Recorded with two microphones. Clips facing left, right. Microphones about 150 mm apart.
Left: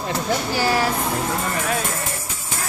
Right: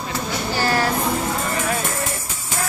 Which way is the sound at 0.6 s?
10° left (ahead or behind).